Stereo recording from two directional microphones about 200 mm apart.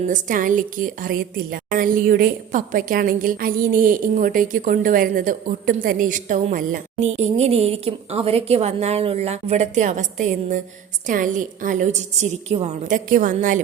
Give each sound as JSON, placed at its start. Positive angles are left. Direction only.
{"t": 0.1, "sound": "a woman's voice", "side_deg": -40}